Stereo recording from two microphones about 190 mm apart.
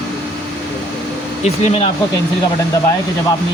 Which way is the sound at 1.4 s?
30° left (ahead or behind).